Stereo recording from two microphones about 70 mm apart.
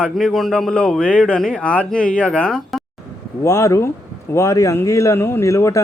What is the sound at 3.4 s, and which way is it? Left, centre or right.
Speech, left.